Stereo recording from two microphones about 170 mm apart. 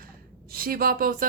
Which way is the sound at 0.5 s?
60° right (ahead or behind).